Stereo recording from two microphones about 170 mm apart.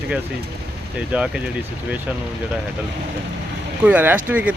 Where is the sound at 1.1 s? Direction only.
10° right (ahead or behind).